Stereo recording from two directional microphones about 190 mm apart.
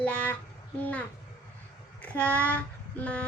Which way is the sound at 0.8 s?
10° left (ahead or behind).